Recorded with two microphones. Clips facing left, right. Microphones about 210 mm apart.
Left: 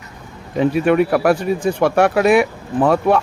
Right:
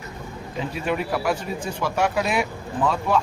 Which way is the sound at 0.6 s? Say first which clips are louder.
Left 12 dB; 60° left (ahead or behind).